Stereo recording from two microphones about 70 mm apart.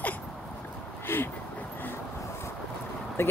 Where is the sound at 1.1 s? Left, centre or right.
Left.